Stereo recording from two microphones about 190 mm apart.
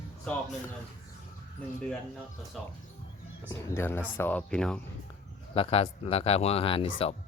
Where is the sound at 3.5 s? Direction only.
15° left (ahead or behind).